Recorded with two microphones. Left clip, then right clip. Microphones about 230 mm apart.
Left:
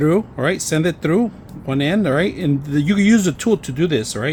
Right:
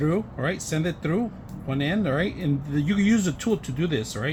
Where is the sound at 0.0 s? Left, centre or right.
Left.